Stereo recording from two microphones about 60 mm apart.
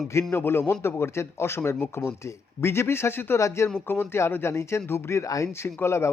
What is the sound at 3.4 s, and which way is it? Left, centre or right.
Speech, left.